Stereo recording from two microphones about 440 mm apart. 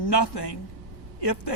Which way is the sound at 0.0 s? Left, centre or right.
Left.